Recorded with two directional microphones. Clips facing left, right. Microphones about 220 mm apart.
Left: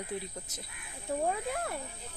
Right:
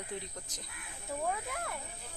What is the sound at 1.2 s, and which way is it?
Speech, 30° left (ahead or behind).